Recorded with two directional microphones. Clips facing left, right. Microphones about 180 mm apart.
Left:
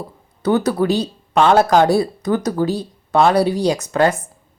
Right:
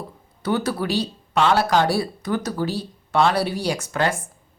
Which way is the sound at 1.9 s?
20° left (ahead or behind).